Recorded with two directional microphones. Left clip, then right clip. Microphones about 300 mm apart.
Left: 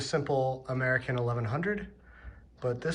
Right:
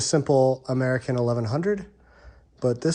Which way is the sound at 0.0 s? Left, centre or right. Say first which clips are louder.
Right 9 dB; right.